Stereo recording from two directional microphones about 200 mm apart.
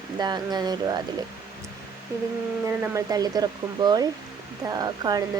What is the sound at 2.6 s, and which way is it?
Speech, 15° right (ahead or behind).